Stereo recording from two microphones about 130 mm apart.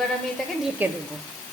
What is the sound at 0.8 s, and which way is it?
Speech, 15° right (ahead or behind).